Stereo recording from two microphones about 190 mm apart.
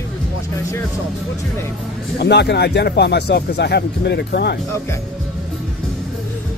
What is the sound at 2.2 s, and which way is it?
Speech, 60° left (ahead or behind).